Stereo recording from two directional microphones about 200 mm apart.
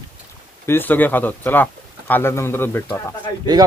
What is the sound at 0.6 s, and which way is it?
Speech, 10° left (ahead or behind).